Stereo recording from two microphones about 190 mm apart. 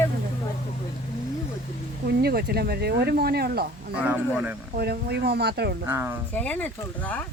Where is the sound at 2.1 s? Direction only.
55° right (ahead or behind).